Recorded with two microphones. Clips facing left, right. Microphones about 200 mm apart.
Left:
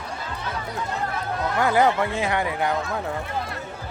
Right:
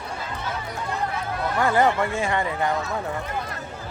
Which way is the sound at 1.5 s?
5° left (ahead or behind).